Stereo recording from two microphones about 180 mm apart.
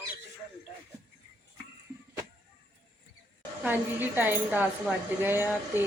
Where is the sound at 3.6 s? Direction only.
10° right (ahead or behind).